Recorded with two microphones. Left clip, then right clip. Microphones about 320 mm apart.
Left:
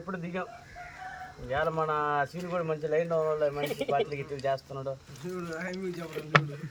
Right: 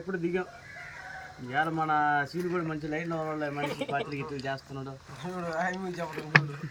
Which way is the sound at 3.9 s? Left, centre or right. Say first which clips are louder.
Left 3 dB; centre.